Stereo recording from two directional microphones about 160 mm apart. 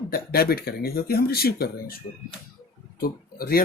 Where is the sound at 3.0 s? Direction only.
70° left (ahead or behind).